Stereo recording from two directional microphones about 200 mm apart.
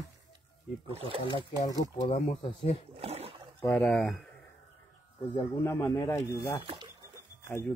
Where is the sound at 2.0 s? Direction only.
30° left (ahead or behind).